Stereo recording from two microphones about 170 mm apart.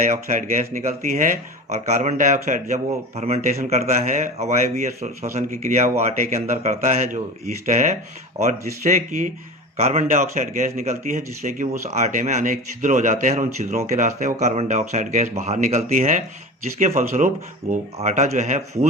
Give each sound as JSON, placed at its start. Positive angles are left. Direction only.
{"t": 0.0, "sound": "speech", "side_deg": -45}
{"t": 8.4, "sound": "speech", "side_deg": -45}